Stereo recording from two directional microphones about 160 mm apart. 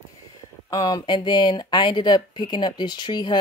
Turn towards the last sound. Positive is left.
turn(degrees=25)  # may be behind; listen again after turning